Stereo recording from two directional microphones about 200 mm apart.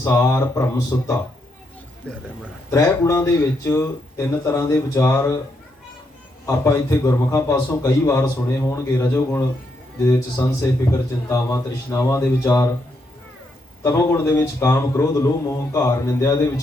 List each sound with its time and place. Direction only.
0.0 s a man's voice: 15° left (ahead or behind)
6.4 s a man's voice: 15° left (ahead or behind)
13.8 s a man's voice: 15° left (ahead or behind)